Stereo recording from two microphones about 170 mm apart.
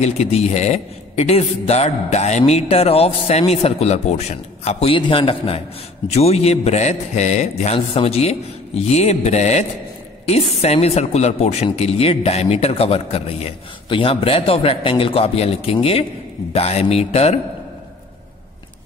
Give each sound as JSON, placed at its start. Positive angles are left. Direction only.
{"t": 0.0, "sound": "speech", "side_deg": 40}